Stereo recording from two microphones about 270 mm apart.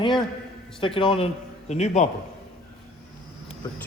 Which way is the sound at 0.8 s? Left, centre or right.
Centre.